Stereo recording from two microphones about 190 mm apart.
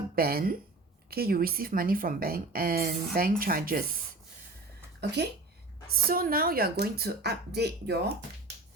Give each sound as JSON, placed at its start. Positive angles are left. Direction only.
{"t": 0.2, "sound": "speech", "side_deg": -55}
{"t": 4.9, "sound": "speech", "side_deg": -60}
{"t": 5.9, "sound": "speech", "side_deg": -50}